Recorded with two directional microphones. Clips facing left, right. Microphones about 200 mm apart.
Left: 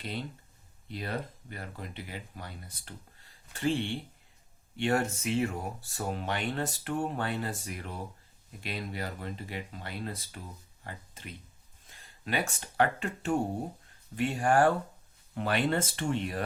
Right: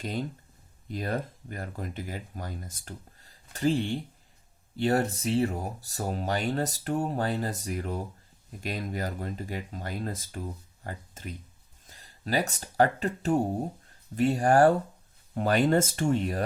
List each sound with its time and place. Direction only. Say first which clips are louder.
0.0 s speech: right 5 dB; 45° right (ahead or behind)